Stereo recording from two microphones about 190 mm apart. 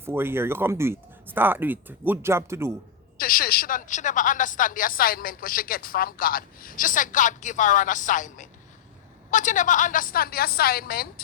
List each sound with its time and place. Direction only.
0.0 s speech: 10° right (ahead or behind)
3.2 s a woman's voice: 50° left (ahead or behind)